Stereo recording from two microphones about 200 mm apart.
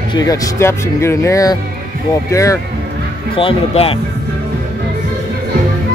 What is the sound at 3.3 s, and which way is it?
Speech, 30° left (ahead or behind).